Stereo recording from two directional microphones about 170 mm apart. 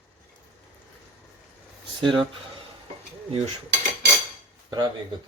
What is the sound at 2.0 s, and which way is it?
Speech, 30° right (ahead or behind).